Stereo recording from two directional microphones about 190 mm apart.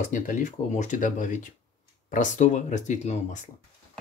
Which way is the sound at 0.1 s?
40° left (ahead or behind).